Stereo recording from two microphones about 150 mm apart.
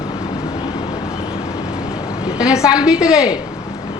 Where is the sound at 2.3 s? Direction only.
5° right (ahead or behind).